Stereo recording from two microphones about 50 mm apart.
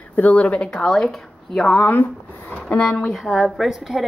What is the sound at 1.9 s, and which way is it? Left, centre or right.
Speech, left.